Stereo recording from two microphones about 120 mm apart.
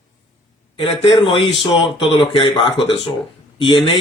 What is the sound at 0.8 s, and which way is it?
Speech, 45° left (ahead or behind).